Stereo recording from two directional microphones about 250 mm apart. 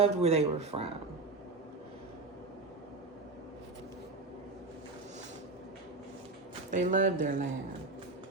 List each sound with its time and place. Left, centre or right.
0.0 s speech: right
6.7 s speech: right